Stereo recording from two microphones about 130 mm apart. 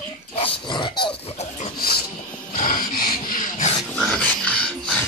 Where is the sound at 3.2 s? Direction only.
90° left.